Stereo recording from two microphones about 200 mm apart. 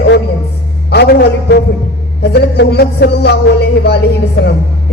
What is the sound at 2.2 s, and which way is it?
Music, 55° left (ahead or behind).